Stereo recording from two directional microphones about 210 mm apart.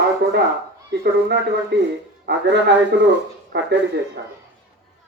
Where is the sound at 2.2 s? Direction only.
55° right (ahead or behind).